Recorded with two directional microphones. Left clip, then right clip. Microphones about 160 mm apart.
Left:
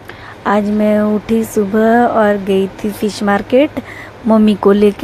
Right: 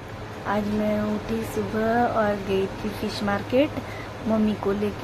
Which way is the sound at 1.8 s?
45° left (ahead or behind).